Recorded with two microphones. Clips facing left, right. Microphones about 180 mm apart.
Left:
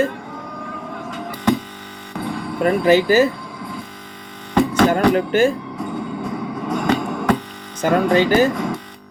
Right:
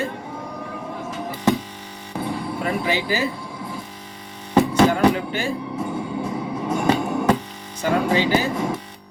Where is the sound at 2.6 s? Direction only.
50° left (ahead or behind).